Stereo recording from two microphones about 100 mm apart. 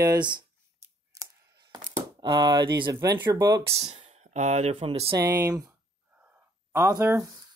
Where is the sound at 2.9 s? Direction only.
35° right (ahead or behind).